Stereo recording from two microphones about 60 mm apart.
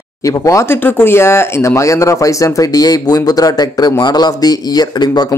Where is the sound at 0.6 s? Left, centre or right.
Left.